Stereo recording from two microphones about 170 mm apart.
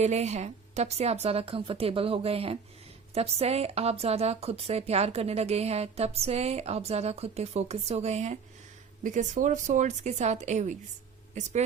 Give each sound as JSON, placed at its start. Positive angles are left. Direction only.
{"t": 0.0, "sound": "speech", "side_deg": -40}